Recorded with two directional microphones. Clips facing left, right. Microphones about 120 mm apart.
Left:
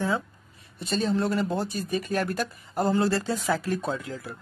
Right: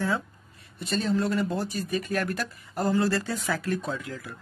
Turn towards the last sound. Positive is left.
turn(degrees=25)  # may be behind; listen again after turning